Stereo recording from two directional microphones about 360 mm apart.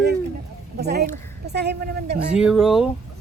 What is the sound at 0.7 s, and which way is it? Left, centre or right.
A woman's voice, right.